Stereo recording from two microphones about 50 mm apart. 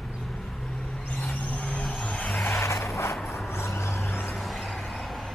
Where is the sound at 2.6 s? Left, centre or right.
Left.